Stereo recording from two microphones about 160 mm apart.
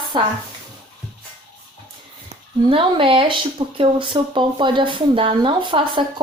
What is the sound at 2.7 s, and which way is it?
Speech, 35° right (ahead or behind).